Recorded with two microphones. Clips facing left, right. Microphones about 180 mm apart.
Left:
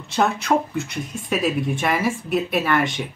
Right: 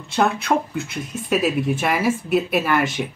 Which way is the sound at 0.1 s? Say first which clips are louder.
Even; centre (ahead or behind).